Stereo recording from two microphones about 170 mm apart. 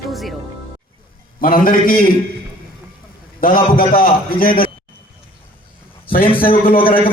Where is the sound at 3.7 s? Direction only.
55° left (ahead or behind).